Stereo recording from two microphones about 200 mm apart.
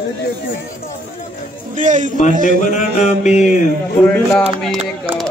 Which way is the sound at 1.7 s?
40° right (ahead or behind).